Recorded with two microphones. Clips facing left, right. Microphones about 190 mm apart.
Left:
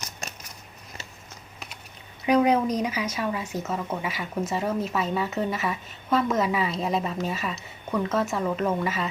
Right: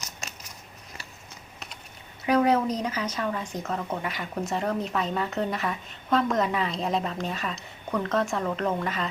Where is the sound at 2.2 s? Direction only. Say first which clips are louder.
Left 1 dB; 15° left (ahead or behind).